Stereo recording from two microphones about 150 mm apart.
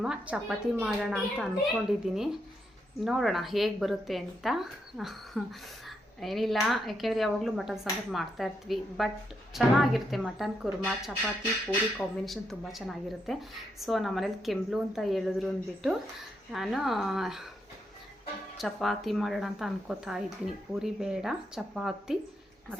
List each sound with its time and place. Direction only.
0.0 s speech: 5° right (ahead or behind)
18.5 s speech: centre (ahead or behind)